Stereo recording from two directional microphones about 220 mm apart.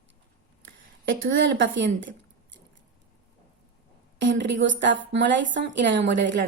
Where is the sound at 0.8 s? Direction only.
60° right (ahead or behind).